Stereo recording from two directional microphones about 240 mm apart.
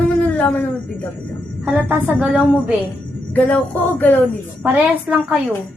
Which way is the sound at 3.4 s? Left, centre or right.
Centre.